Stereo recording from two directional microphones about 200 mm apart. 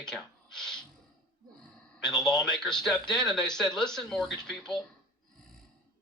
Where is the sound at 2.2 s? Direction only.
Centre (ahead or behind).